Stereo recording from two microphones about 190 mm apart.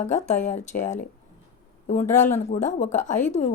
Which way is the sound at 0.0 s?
40° left (ahead or behind).